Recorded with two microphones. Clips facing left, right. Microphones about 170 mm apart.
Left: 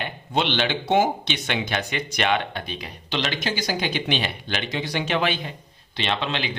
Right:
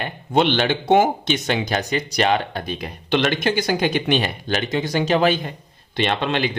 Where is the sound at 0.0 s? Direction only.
50° right (ahead or behind).